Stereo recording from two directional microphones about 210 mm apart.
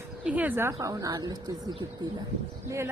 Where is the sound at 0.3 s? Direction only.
5° right (ahead or behind).